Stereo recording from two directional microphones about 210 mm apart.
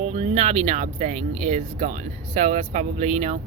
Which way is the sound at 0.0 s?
30° right (ahead or behind).